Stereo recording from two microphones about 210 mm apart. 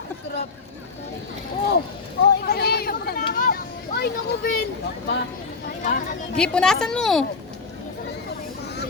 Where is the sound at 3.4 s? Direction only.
45° left (ahead or behind).